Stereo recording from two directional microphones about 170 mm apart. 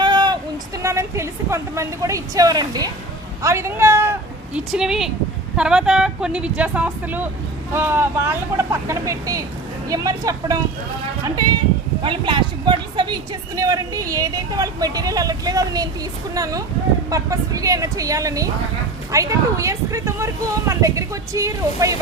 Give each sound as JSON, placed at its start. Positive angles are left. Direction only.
{"t": 0.0, "sound": "a sound", "side_deg": -25}
{"t": 0.8, "sound": "a woman's voice", "side_deg": -15}
{"t": 4.5, "sound": "a woman's voice", "side_deg": -5}